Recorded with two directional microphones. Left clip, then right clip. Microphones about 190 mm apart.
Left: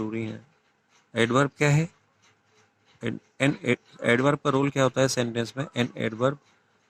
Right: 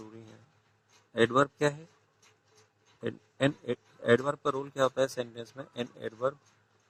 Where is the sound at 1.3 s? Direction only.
40° left (ahead or behind).